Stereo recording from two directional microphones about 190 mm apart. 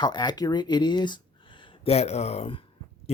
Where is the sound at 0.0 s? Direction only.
20° left (ahead or behind).